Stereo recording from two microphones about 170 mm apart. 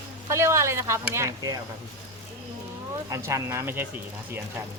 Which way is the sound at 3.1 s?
20° right (ahead or behind).